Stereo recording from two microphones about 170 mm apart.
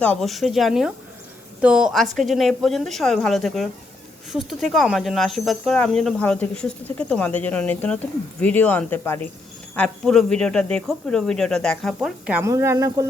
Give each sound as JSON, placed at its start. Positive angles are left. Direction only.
{"t": 0.0, "sound": "speech", "side_deg": 5}
{"t": 11.9, "sound": "speech", "side_deg": -10}